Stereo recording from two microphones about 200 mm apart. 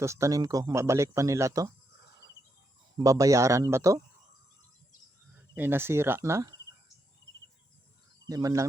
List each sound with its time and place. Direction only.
0.0 s speech: 15° right (ahead or behind)
3.0 s speech: 15° right (ahead or behind)
5.5 s speech: 10° right (ahead or behind)
8.3 s speech: 15° right (ahead or behind)